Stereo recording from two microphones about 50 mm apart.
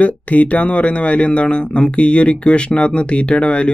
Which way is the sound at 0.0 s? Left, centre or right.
Left.